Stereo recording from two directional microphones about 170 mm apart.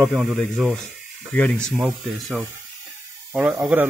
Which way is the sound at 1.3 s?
10° left (ahead or behind).